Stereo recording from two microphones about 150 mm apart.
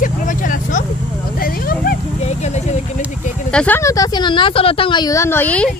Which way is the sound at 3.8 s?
20° left (ahead or behind).